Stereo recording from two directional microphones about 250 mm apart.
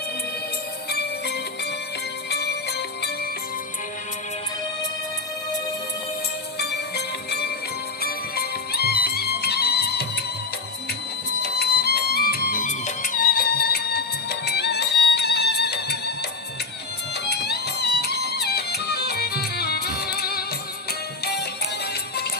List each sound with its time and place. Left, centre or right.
2.3 s music: left
6.6 s music: left
11.4 s music: left
17.2 s music: left